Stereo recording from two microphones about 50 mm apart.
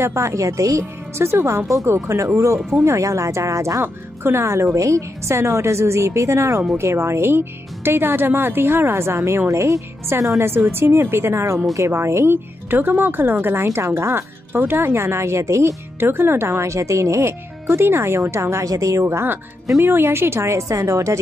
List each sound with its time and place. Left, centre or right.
0.0 s a woman's voice: right
3.8 s a woman's voice: right
4.7 s a woman's voice: right
6.8 s speech: right
9.5 s speech: right
10.4 s a woman's voice: right
11.7 s a woman's voice: right
12.6 s speech: right
13.7 s a woman's voice: right
14.5 s a woman's voice: right
16.0 s a woman's voice: right
19.8 s a woman's voice: right